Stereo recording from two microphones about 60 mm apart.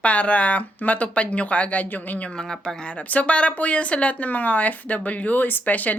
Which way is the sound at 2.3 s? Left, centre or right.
Centre.